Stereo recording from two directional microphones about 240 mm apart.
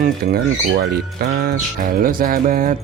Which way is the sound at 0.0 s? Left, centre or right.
Right.